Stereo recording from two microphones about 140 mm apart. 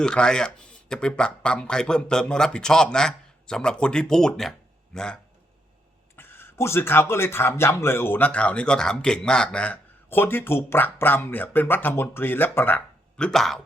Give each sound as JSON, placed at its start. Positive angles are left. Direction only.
{"t": 0.0, "sound": "speech", "side_deg": 5}